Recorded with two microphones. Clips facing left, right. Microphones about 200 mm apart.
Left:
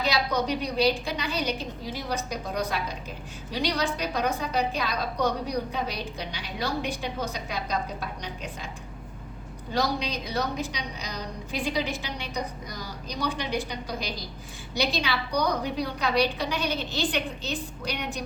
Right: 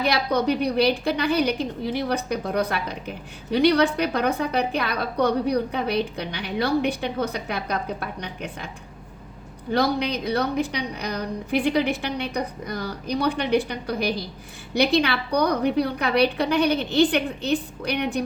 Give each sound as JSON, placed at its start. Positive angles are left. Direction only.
{"t": 0.0, "sound": "a woman's voice", "side_deg": -60}
{"t": 9.7, "sound": "a woman's voice", "side_deg": -60}